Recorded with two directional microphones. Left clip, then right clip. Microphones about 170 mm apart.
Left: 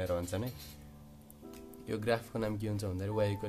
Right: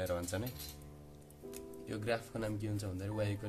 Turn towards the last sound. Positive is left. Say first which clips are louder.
# left 6 dB
turn(degrees=40)  # may be behind; listen again after turning